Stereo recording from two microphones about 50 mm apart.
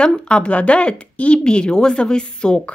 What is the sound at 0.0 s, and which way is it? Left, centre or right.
Speech, centre.